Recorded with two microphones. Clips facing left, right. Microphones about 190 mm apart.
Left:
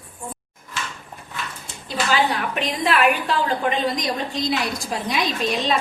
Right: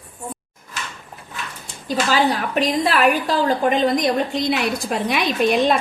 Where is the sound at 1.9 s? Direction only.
40° right (ahead or behind).